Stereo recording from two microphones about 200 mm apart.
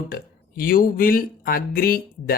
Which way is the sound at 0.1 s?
45° left (ahead or behind).